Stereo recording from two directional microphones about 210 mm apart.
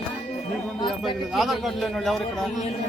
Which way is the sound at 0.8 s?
Centre (ahead or behind).